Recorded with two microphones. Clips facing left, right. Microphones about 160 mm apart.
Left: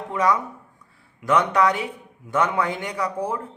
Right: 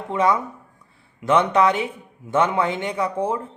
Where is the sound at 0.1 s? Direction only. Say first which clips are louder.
Right 2 dB; 25° right (ahead or behind).